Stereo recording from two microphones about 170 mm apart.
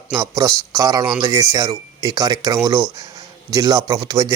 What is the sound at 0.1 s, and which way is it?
Speech, 20° right (ahead or behind).